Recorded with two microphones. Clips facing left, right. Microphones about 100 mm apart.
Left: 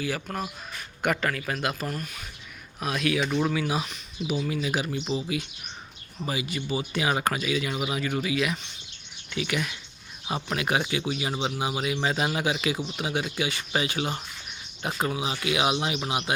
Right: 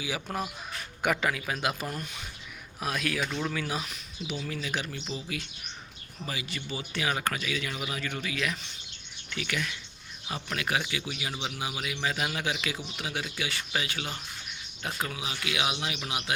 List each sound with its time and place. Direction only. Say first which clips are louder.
0.3 s speech: left 1 dB; 20° right (ahead or behind)
1.0 s speech: left 2 dB; 5° right (ahead or behind)
1.8 s speech: left 3 dB; 20° right (ahead or behind)
2.8 s speech: left 4 dB; centre (ahead or behind)
3.2 s a man's voice: left 6 dB; 10° left (ahead or behind); by 12.4 s 30° left (ahead or behind)
12.6 s a man's voice: left 6 dB; 20° left (ahead or behind)